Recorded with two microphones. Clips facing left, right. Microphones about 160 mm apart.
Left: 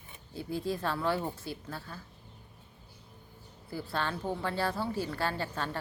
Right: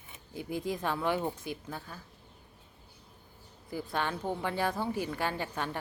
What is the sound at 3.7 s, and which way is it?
Speech, 15° right (ahead or behind).